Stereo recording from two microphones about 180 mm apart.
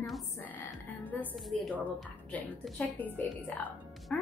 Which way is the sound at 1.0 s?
5° left (ahead or behind).